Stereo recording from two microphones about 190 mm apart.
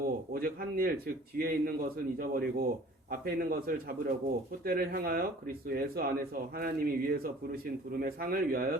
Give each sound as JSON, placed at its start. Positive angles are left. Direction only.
{"t": 0.0, "sound": "speech", "side_deg": -50}